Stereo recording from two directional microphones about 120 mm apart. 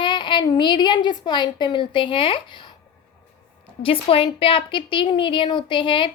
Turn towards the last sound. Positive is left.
turn(degrees=45)  # may be behind; listen again after turning